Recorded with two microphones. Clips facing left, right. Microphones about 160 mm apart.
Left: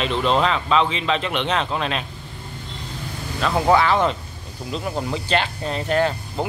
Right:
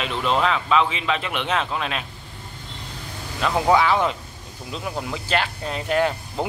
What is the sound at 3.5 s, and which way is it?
Speech, 5° right (ahead or behind).